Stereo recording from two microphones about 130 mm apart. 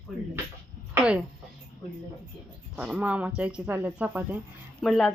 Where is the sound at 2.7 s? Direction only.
10° right (ahead or behind).